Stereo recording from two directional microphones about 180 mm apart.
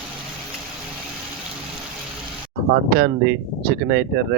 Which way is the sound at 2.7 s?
60° right (ahead or behind).